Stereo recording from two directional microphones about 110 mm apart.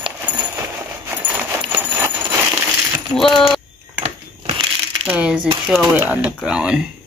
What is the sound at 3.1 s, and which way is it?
Speech, centre (ahead or behind).